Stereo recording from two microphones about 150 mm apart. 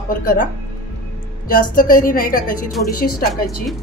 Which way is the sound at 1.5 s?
65° left (ahead or behind).